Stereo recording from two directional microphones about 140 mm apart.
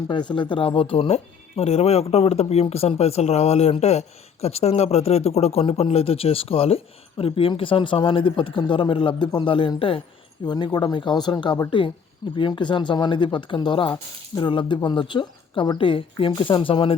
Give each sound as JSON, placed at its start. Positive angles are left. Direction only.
{"t": 0.1, "sound": "speech", "side_deg": 35}